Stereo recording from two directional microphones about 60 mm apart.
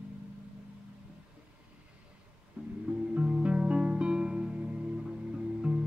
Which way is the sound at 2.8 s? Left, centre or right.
Right.